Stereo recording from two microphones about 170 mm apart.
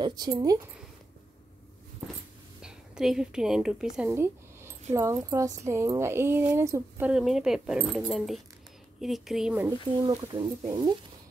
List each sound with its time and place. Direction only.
0.0 s speech: 25° right (ahead or behind)
2.6 s a woman's voice: 5° right (ahead or behind)
4.1 s a sound: 15° right (ahead or behind)
4.9 s speech: 15° right (ahead or behind)
7.1 s speech: 5° right (ahead or behind)
9.7 s speech: 25° right (ahead or behind)